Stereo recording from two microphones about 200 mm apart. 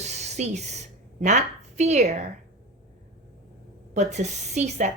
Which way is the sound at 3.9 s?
35° right (ahead or behind).